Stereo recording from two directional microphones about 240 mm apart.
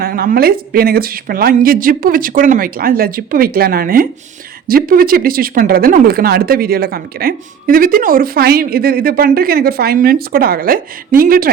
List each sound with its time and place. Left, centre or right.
0.0 s speech: right